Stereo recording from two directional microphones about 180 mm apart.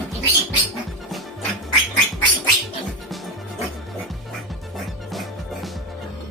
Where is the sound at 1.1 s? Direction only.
Centre (ahead or behind).